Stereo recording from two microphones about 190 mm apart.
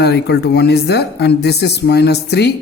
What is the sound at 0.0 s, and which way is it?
Speech, 60° left (ahead or behind).